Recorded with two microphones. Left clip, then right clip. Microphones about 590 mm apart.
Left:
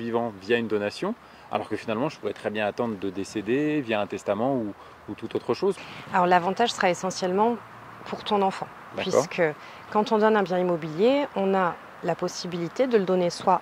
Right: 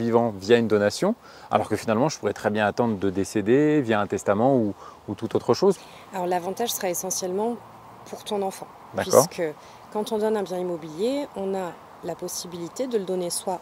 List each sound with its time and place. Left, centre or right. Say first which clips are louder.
0.0 s speech: right 6 dB; right
6.1 s speech: left 5 dB; left